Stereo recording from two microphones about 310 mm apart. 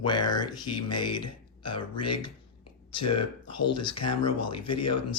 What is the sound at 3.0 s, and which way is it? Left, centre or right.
Speech, left.